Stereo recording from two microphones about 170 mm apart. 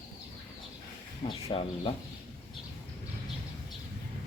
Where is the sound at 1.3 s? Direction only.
35° left (ahead or behind).